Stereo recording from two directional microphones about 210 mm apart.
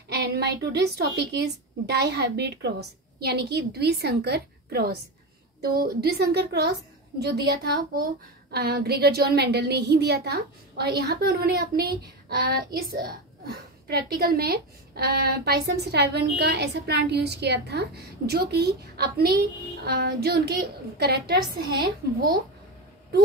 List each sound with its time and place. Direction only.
0.1 s a woman's voice: 55° right (ahead or behind)